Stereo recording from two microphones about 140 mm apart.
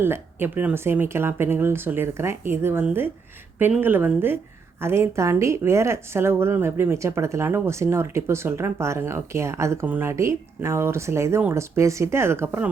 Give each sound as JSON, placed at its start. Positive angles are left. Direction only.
{"t": 0.0, "sound": "a woman's voice", "side_deg": -15}